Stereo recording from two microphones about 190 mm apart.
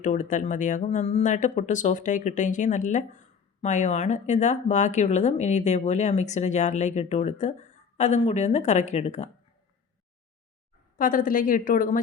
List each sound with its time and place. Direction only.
0.0 s speech: 40° left (ahead or behind)
10.9 s a woman's voice: 45° left (ahead or behind)